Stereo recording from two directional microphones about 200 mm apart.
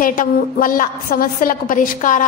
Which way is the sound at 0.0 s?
45° left (ahead or behind).